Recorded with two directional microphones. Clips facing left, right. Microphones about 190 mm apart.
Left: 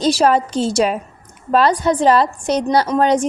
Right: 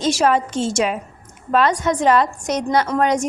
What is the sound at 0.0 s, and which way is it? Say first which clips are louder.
A woman's voice: left 3 dB; 35° left (ahead or behind).